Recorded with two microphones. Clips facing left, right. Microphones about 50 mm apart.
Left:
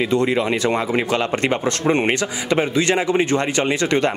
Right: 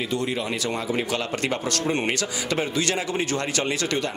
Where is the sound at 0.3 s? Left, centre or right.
Left.